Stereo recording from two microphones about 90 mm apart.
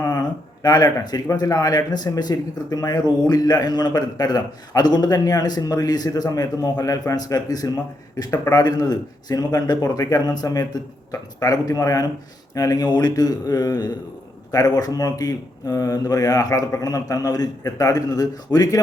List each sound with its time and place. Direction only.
0.0 s a man's voice: 45° left (ahead or behind)